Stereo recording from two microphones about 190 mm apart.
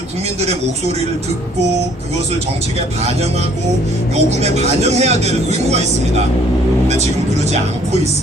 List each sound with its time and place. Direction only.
4.1 s speech: 35° right (ahead or behind)